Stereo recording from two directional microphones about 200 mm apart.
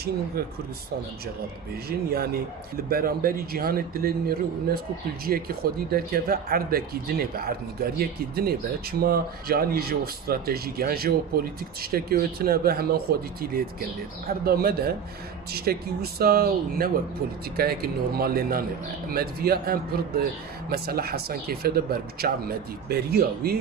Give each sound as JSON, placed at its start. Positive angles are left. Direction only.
{"t": 1.9, "sound": "a man's voice", "side_deg": -50}